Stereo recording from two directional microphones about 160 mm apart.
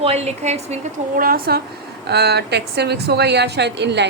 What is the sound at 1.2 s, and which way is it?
Speech, 70° right (ahead or behind).